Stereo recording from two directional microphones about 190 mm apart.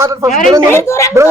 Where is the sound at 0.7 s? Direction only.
15° left (ahead or behind).